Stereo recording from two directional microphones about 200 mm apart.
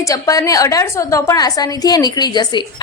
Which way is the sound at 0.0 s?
15° left (ahead or behind).